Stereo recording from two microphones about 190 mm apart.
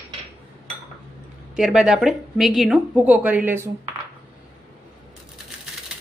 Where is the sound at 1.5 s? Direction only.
5° right (ahead or behind).